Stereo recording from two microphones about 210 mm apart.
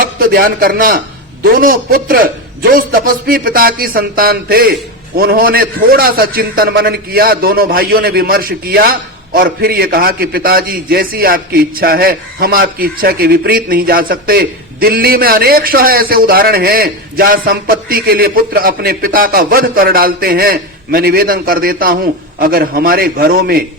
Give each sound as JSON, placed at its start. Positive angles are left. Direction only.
{"t": 0.0, "sound": "a man's voice", "side_deg": -45}